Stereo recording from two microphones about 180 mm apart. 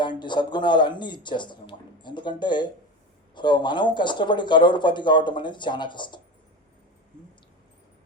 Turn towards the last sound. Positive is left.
turn(degrees=25)  # may be behind; listen again after turning